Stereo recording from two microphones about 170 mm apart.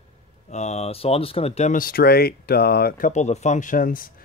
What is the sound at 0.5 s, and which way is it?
Speech, 40° left (ahead or behind).